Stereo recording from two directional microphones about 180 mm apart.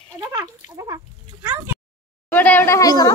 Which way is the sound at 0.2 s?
20° right (ahead or behind).